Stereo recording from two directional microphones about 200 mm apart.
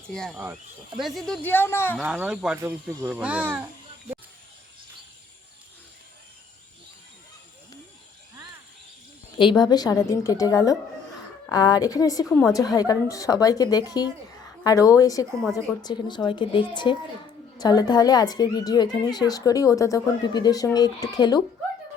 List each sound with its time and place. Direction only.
0.1 s a woman's voice: 5° left (ahead or behind)
2.0 s speech: 10° right (ahead or behind)
9.4 s a woman's voice: 25° left (ahead or behind)